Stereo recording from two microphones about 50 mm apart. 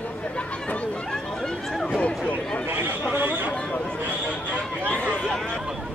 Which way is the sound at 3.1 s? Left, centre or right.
Right.